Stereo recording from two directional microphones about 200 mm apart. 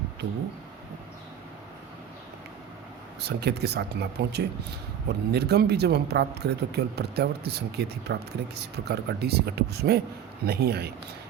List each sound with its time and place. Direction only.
3.2 s speech: 55° right (ahead or behind)